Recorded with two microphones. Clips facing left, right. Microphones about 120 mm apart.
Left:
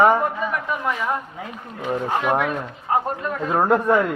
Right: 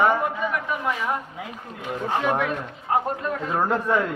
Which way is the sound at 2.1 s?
15° left (ahead or behind).